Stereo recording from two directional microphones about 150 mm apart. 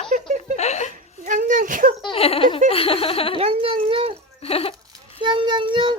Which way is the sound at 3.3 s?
40° right (ahead or behind).